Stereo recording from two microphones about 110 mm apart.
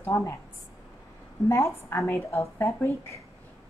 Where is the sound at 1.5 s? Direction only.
25° left (ahead or behind).